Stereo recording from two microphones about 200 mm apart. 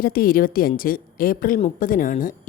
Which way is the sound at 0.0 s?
45° left (ahead or behind).